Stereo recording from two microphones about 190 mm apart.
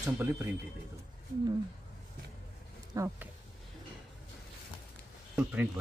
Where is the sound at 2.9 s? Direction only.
15° right (ahead or behind).